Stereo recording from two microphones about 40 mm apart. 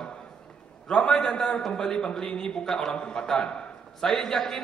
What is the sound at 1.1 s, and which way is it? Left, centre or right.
A man's voice, centre.